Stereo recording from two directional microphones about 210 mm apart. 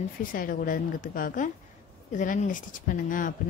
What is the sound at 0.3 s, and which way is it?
Speech, 40° left (ahead or behind).